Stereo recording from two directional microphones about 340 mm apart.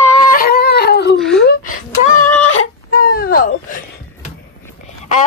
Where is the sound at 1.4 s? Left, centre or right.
Left.